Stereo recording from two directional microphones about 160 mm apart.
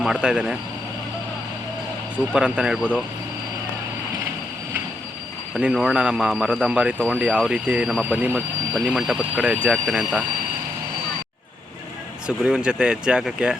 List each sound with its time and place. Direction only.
0.0 s speech: 5° right (ahead or behind)
2.1 s speech: 5° right (ahead or behind)
5.5 s speech: 5° right (ahead or behind)
12.5 s speech: 5° right (ahead or behind)